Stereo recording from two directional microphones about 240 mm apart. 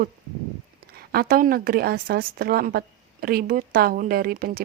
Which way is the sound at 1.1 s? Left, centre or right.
Right.